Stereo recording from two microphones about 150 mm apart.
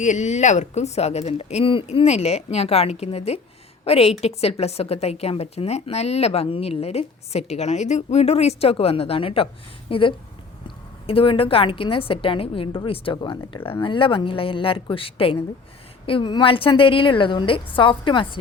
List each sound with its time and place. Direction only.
0.0 s a woman's voice: 55° left (ahead or behind); by 18.3 s 35° left (ahead or behind)